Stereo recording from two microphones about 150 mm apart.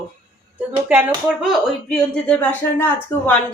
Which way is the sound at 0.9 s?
10° right (ahead or behind).